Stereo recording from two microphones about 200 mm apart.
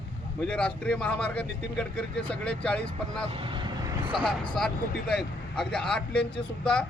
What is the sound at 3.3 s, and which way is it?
Vehicle, 25° right (ahead or behind).